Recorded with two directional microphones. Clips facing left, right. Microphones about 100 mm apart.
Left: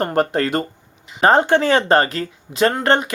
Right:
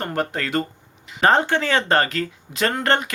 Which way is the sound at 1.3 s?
20° left (ahead or behind).